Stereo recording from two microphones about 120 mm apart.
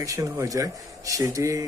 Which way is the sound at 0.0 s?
30° right (ahead or behind).